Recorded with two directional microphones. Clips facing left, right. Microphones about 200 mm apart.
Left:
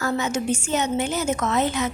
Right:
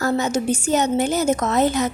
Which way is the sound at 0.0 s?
35° right (ahead or behind).